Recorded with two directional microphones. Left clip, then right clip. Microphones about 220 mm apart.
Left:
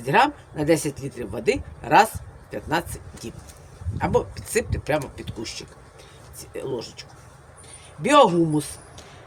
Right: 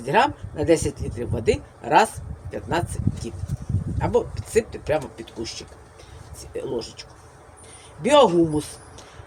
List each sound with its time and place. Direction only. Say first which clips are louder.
0.0 s speech: left 1 dB; 25° left (ahead or behind)
8.0 s speech: even; 25° left (ahead or behind)